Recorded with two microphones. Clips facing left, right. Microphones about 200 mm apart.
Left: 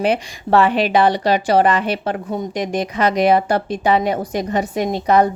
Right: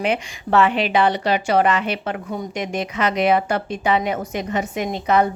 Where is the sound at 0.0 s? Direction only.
35° left (ahead or behind).